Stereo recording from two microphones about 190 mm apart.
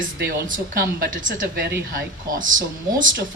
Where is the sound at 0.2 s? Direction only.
50° right (ahead or behind).